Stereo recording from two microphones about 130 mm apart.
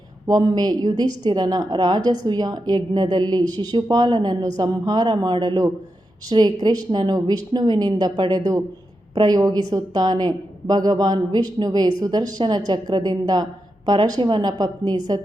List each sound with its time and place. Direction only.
0.3 s a woman's voice: 30° right (ahead or behind)